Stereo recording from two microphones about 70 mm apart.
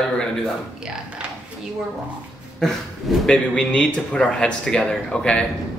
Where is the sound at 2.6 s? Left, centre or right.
Centre.